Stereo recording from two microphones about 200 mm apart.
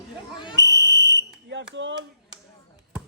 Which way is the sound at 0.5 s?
65° right (ahead or behind).